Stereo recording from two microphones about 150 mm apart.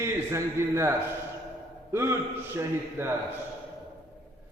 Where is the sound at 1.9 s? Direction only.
15° right (ahead or behind).